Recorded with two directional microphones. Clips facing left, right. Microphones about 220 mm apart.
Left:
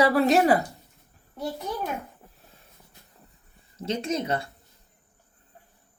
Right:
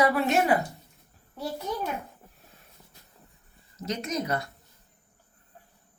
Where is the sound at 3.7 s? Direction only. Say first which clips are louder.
Left 3 dB; 30° left (ahead or behind).